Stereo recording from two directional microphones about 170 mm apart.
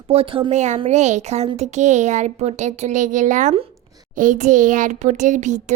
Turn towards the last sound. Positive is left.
turn(degrees=-45)  # may be behind; listen again after turning